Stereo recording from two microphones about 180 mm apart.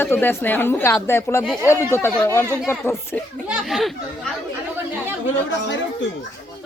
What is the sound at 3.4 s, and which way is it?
Speech, centre (ahead or behind).